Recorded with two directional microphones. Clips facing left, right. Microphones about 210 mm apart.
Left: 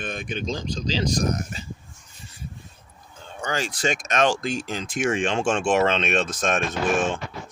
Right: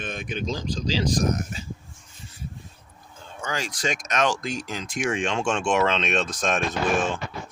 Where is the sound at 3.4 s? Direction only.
35° left (ahead or behind).